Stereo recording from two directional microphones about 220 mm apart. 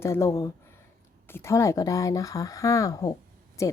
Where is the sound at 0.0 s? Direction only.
15° left (ahead or behind).